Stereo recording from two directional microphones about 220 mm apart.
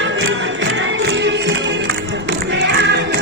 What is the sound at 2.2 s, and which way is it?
Music, 50° right (ahead or behind).